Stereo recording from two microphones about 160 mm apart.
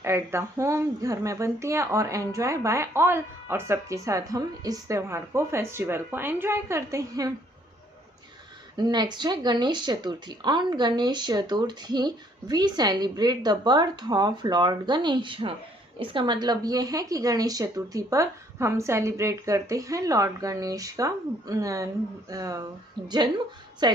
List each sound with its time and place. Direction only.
0.0 s speech: 15° right (ahead or behind)
8.7 s speech: 25° right (ahead or behind)